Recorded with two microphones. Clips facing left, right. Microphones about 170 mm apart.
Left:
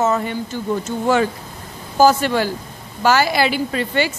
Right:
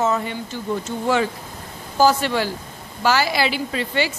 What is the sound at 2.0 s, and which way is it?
A woman's voice, 45° left (ahead or behind).